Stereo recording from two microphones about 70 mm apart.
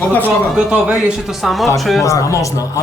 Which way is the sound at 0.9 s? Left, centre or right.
Centre.